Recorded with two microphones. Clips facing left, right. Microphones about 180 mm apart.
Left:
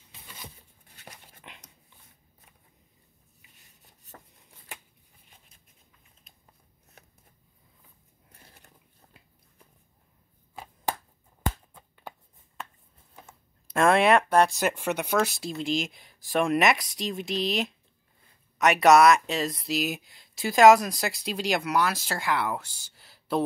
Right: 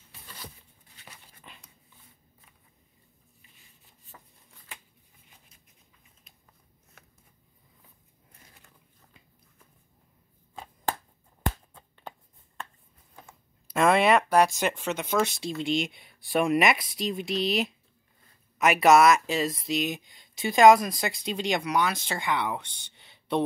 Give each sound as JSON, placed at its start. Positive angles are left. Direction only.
{"t": 1.0, "sound": "dog", "side_deg": 45}
{"t": 8.4, "sound": "a sound", "side_deg": 40}
{"t": 10.5, "sound": "chopping", "side_deg": 5}
{"t": 13.2, "sound": "a sound", "side_deg": 0}
{"t": 14.6, "sound": "speech", "side_deg": 10}
{"t": 15.1, "sound": "speech", "side_deg": 0}